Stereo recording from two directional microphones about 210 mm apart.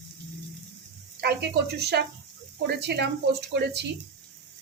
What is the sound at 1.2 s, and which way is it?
A woman's voice, 50° right (ahead or behind).